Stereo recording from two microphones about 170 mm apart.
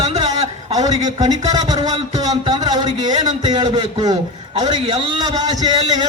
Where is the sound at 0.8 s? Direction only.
25° right (ahead or behind).